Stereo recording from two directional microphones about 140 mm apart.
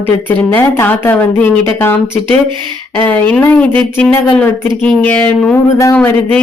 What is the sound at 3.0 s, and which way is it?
Speech, 10° left (ahead or behind).